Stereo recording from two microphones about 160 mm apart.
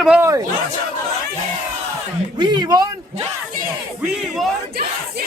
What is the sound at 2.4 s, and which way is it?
Speech, 25° right (ahead or behind).